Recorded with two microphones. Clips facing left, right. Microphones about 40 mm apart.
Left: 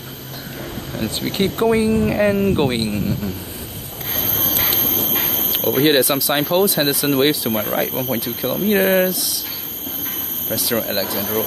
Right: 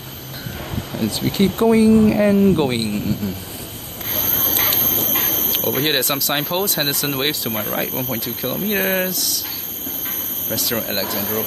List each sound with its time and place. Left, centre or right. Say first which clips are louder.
0.9 s speech: right 2 dB; left
2.6 s speech: left 1 dB; centre
4.3 s a sound: even; centre
5.1 s speech: even; centre
10.5 s speech: left 2 dB; centre